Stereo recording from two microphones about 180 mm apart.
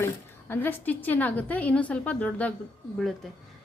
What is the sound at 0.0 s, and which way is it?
A woman's voice, 10° left (ahead or behind).